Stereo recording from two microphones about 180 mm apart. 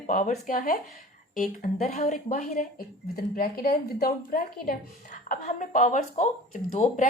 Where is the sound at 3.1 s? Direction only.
55° left (ahead or behind).